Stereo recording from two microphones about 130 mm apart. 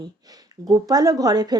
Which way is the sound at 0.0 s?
30° right (ahead or behind).